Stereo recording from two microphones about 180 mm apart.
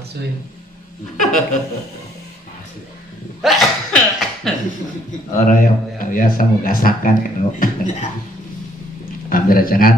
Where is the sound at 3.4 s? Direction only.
Centre (ahead or behind).